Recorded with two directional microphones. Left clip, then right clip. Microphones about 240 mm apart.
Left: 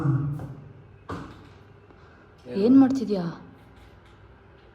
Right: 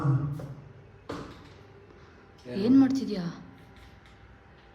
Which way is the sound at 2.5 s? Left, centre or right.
Centre.